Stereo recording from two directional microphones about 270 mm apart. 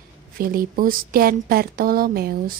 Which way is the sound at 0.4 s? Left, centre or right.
Right.